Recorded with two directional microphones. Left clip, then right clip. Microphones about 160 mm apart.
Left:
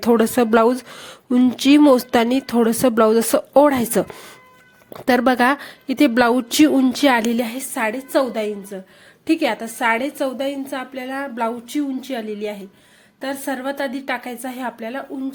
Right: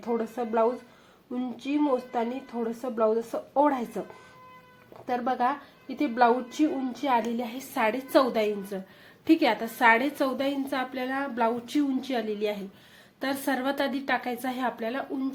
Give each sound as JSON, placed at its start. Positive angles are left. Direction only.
{"t": 0.0, "sound": "speech", "side_deg": 85}
{"t": 5.0, "sound": "a woman's voice", "side_deg": 65}
{"t": 7.4, "sound": "a woman's voice", "side_deg": 40}
{"t": 7.8, "sound": "a woman's voice", "side_deg": 25}